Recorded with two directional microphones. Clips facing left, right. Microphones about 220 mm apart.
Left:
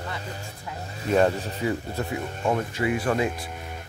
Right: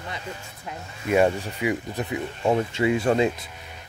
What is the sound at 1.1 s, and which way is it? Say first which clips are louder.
Speech: right 1 dB; 10° right (ahead or behind).